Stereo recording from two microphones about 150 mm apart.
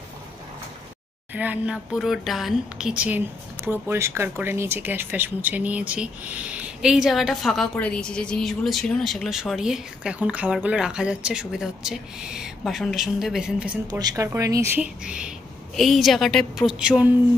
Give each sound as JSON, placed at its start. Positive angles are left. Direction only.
{"t": 1.3, "sound": "a woman's voice", "side_deg": -10}
{"t": 13.8, "sound": "speech", "side_deg": -25}
{"t": 14.8, "sound": "a woman's voice", "side_deg": -5}